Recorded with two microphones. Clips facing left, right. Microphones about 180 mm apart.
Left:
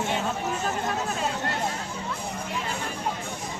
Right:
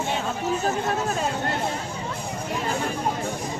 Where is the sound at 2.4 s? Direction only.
45° right (ahead or behind).